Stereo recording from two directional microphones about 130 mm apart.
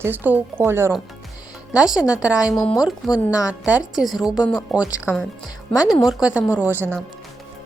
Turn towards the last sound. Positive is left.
turn(degrees=-15)  # may be behind; listen again after turning